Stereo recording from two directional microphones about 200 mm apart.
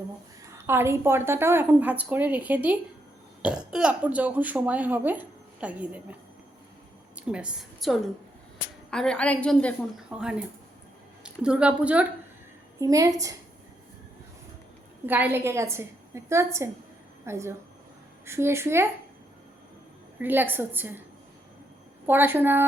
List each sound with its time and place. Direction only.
0.7 s speech: 10° right (ahead or behind)
7.2 s a woman's voice: 5° right (ahead or behind)
10.2 s a woman's voice: 5° right (ahead or behind)
12.8 s speech: 15° right (ahead or behind)
15.0 s speech: 10° right (ahead or behind)
20.1 s speech: 10° right (ahead or behind)
22.0 s speech: 10° right (ahead or behind)